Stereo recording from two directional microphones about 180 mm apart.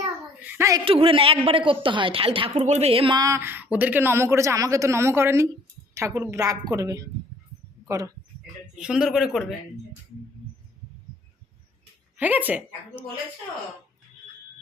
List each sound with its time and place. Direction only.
0.4 s a woman's voice: 15° right (ahead or behind)
0.9 s a woman's voice: 30° right (ahead or behind)
8.8 s speech: 5° right (ahead or behind)
12.1 s a woman's voice: 10° right (ahead or behind)